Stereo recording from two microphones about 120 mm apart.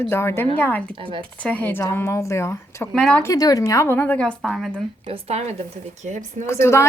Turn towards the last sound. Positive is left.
turn(degrees=20)  # may be behind; listen again after turning